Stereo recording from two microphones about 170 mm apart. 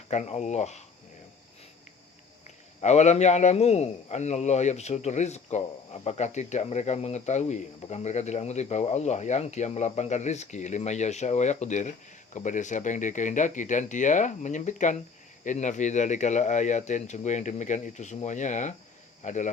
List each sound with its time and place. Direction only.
0.1 s a man's voice: 40° left (ahead or behind)
2.8 s a man's voice: 40° left (ahead or behind)